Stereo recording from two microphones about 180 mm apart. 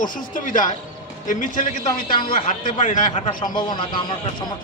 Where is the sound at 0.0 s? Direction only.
50° left (ahead or behind).